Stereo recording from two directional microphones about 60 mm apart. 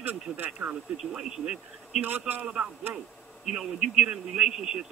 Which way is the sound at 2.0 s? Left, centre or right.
Right.